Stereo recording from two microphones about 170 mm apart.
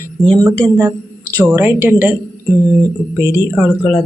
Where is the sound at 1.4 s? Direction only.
15° right (ahead or behind).